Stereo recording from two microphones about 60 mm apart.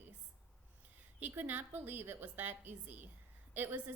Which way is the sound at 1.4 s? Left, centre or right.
Right.